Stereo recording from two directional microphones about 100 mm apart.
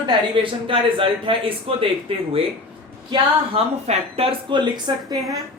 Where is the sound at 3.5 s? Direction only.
85° right.